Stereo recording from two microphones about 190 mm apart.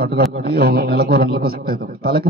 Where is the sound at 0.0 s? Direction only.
55° right (ahead or behind).